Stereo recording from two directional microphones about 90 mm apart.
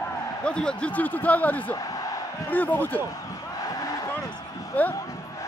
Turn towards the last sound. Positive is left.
turn(degrees=20)  # may be behind; listen again after turning